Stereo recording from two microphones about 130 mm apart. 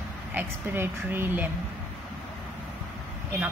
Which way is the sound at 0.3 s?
15° right (ahead or behind).